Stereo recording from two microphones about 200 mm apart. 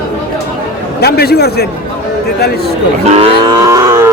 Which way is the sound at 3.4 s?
20° right (ahead or behind).